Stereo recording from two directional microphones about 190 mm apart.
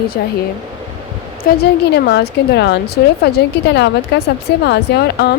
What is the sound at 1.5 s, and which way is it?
A woman's voice, 55° left (ahead or behind).